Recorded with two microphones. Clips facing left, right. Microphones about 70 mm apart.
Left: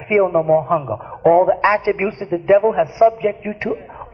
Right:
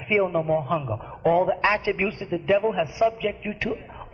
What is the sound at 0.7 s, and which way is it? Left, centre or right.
A woman's voice, left.